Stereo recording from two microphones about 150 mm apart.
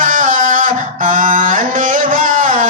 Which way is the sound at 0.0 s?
65° right (ahead or behind).